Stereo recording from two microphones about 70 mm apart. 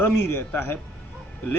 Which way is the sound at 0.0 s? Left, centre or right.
Left.